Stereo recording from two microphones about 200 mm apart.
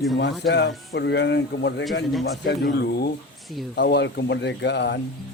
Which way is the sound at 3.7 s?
55° left (ahead or behind).